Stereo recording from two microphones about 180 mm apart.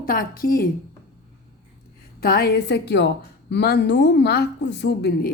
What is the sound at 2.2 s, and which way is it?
A woman's voice, 60° left (ahead or behind).